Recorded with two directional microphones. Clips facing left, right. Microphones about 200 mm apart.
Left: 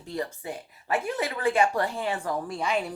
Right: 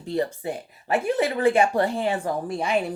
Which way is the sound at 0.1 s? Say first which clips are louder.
Right 7 dB; 30° right (ahead or behind).